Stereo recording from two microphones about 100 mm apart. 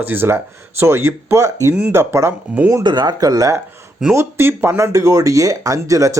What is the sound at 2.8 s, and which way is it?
Speech, 45° right (ahead or behind).